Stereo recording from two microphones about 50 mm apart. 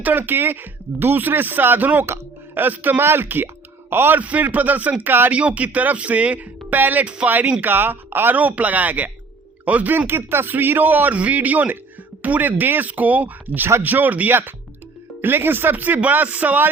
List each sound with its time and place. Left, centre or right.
0.0 s speech: right
3.0 s speech: right
4.2 s speech: right
5.3 s speech: right
7.0 s speech: right
7.3 s speech: right
10.1 s speech: right
15.2 s speech: right